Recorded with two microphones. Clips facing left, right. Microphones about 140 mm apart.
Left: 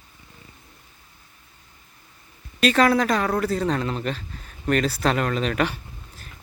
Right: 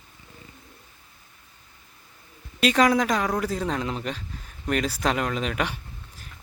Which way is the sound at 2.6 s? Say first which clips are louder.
Left 2 dB; 15° right (ahead or behind).